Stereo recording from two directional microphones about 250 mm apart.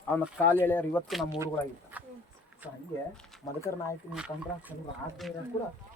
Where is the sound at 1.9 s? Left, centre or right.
Centre.